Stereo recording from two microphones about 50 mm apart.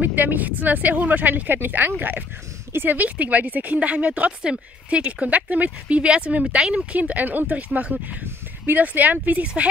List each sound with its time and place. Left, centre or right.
0.0 s a woman's voice: right